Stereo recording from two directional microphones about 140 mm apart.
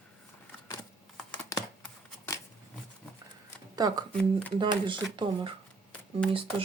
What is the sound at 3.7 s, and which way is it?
Speech, 30° right (ahead or behind).